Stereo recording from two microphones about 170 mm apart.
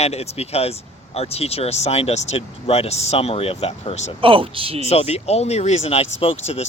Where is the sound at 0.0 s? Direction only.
40° left (ahead or behind).